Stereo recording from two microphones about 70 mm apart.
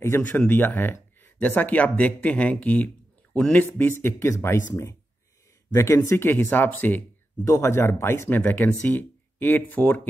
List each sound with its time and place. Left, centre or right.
0.1 s speech: left; by 3.6 s centre
3.6 s speech: left
7.4 s speech: left
8.4 s speech: left